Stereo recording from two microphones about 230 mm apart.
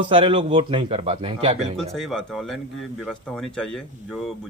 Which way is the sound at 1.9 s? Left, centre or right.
Centre.